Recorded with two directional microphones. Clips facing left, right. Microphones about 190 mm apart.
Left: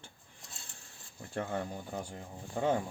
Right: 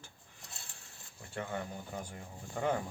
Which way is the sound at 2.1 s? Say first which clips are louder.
Left 3 dB; 25° left (ahead or behind).